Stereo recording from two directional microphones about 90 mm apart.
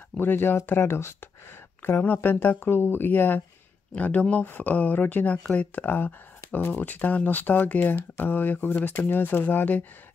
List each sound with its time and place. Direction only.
0.2 s speech: 25° left (ahead or behind)